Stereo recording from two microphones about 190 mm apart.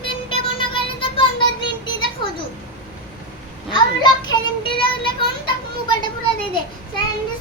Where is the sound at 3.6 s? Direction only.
25° left (ahead or behind).